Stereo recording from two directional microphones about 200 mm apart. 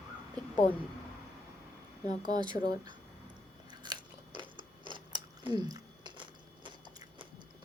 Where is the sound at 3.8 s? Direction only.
20° right (ahead or behind).